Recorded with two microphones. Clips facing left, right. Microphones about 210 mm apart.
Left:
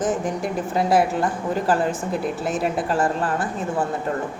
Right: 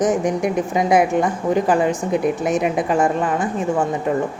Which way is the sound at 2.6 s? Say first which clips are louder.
Right 4 dB; 15° right (ahead or behind).